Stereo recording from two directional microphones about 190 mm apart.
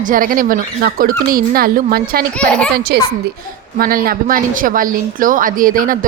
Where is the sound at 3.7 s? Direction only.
50° right (ahead or behind).